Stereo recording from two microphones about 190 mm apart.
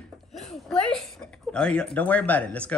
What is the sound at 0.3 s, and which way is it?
Speech, centre (ahead or behind).